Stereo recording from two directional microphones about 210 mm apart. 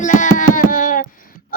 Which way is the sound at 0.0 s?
35° left (ahead or behind).